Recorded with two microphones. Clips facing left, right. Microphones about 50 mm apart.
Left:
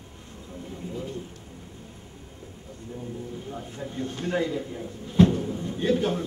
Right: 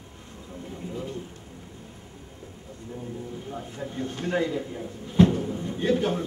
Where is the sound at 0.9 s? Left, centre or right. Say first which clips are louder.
Even; centre.